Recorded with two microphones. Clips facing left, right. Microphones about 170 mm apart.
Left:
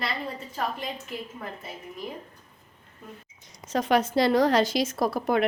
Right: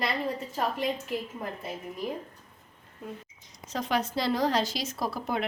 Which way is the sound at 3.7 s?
65° left (ahead or behind).